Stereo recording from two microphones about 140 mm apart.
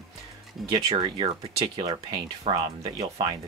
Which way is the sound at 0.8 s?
35° right (ahead or behind).